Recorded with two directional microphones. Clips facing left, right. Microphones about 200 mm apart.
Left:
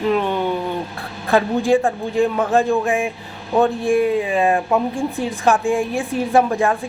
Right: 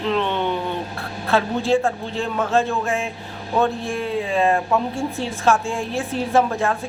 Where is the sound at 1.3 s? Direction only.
15° left (ahead or behind).